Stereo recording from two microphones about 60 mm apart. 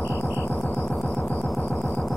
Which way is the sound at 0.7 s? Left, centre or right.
Centre.